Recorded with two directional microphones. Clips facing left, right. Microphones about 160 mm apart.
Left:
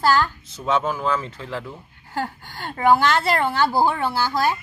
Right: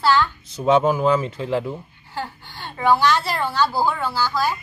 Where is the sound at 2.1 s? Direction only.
45° left (ahead or behind).